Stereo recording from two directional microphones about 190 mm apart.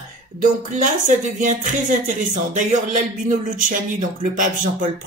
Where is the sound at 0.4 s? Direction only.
40° right (ahead or behind).